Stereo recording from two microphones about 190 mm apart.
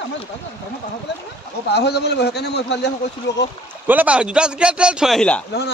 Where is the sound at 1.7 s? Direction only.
60° left (ahead or behind).